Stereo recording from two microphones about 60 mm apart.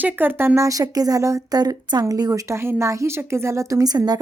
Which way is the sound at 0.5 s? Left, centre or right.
Right.